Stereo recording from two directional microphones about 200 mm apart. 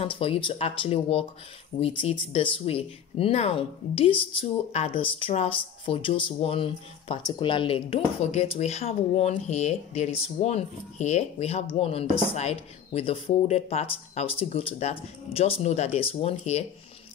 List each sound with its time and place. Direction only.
0.0 s speech: 30° left (ahead or behind)